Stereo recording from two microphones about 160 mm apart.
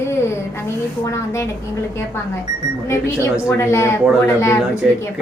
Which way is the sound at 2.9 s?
15° left (ahead or behind).